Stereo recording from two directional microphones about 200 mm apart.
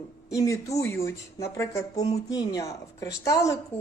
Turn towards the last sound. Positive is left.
turn(degrees=15)  # may be behind; listen again after turning